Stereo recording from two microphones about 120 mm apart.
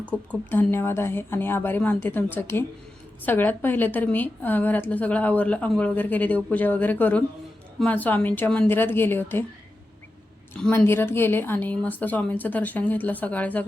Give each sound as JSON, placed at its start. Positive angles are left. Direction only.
{"t": 0.3, "sound": "a woman's voice", "side_deg": 15}
{"t": 10.7, "sound": "a woman's voice", "side_deg": 20}